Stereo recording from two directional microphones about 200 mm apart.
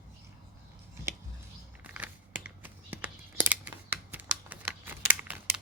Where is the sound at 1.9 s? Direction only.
5° right (ahead or behind).